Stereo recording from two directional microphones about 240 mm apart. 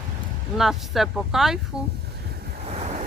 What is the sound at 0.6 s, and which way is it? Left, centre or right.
Speech, centre.